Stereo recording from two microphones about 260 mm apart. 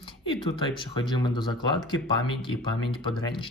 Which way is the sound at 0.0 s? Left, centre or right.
Centre.